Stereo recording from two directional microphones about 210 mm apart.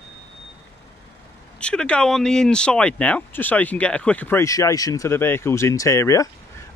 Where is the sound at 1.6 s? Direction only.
5° left (ahead or behind).